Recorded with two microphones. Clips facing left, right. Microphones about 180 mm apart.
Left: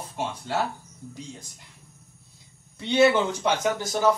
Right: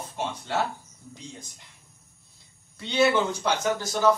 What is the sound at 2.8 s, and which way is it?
Speech, 20° left (ahead or behind).